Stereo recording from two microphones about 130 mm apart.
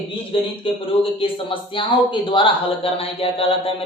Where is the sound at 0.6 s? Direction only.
45° left (ahead or behind).